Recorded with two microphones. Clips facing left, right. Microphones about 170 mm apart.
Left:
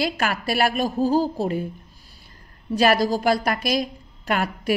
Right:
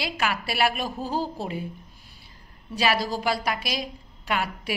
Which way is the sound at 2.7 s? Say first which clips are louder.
Left 6 dB; 45° left (ahead or behind).